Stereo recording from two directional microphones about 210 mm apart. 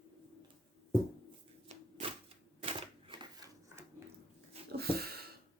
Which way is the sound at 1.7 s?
30° right (ahead or behind).